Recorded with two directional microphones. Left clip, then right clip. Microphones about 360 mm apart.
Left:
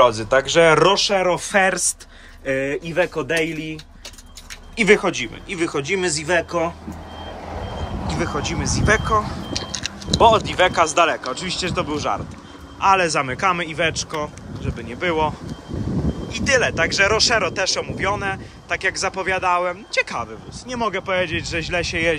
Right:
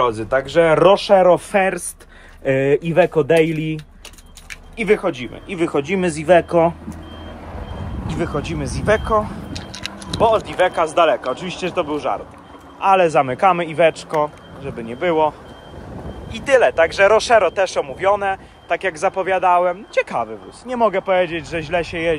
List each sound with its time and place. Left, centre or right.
0.0 s speech: centre
4.7 s speech: centre
7.4 s reversing beeps: left
8.2 s speech: centre
9.6 s a sound: centre
10.2 s speech: centre